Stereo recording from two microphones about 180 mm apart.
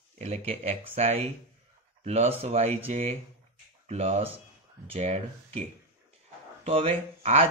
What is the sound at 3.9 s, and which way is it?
Speech, 35° right (ahead or behind).